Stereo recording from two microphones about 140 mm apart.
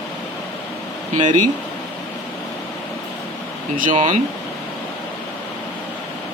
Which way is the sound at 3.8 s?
70° right (ahead or behind).